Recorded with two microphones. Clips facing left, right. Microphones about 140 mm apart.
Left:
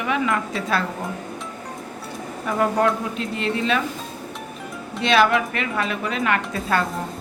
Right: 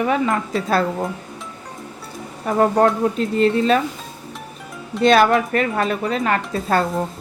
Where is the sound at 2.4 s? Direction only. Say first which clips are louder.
Right 4 dB; 40° right (ahead or behind).